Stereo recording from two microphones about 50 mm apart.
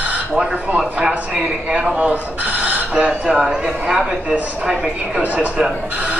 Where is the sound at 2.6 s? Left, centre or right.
Right.